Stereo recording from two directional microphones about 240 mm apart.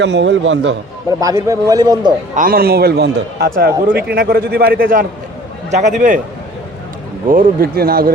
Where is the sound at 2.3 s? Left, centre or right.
Right.